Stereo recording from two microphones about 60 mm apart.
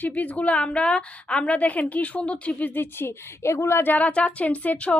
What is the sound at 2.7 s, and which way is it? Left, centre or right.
Speech, left.